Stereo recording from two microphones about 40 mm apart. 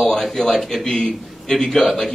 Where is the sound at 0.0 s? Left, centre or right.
Centre.